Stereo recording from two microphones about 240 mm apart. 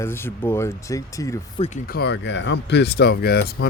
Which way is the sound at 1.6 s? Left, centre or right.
Left.